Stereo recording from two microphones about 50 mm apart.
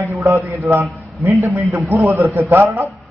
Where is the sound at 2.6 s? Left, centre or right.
Right.